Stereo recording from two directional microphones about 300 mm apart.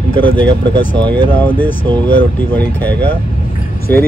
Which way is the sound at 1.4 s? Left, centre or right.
Centre.